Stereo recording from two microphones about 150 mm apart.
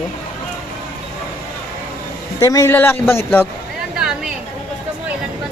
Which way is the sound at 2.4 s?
20° left (ahead or behind).